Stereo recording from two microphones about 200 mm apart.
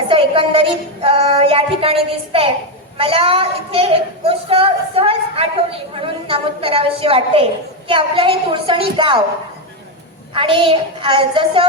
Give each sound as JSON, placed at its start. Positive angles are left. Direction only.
{"t": 0.1, "sound": "a woman's voice", "side_deg": -25}
{"t": 10.3, "sound": "a woman's voice", "side_deg": -25}